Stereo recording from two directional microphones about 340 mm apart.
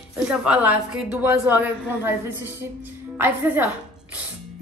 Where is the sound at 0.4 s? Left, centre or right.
Centre.